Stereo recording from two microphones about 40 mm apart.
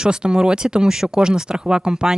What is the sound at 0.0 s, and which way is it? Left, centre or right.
Speech, right.